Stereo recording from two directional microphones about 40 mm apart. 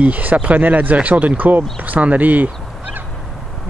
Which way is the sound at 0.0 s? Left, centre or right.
Right.